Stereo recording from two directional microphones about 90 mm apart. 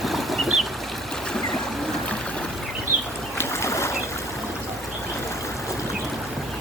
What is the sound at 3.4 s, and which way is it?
Boat, 30° left (ahead or behind).